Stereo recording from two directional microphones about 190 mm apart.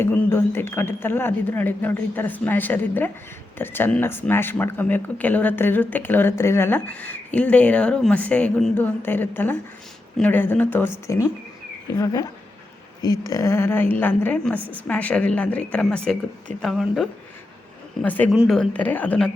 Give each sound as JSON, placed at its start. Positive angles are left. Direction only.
{"t": 0.0, "sound": "a woman's voice", "side_deg": 10}